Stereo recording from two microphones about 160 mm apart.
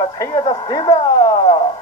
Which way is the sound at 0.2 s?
25° left (ahead or behind).